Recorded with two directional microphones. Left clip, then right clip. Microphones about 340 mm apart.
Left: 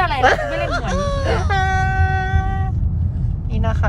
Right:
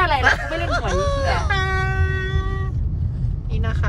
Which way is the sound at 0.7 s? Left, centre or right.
Centre.